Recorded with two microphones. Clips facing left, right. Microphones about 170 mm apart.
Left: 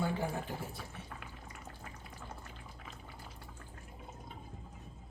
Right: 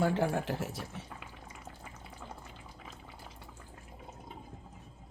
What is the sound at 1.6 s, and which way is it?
Water, 10° right (ahead or behind).